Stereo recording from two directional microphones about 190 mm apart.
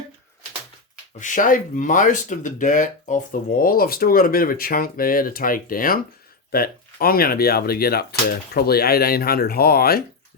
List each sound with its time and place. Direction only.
1.2 s speech: 45° left (ahead or behind)